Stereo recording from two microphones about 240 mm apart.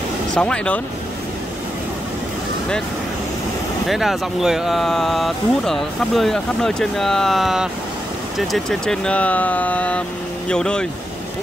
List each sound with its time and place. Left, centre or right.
0.3 s speech: centre
3.8 s speech: centre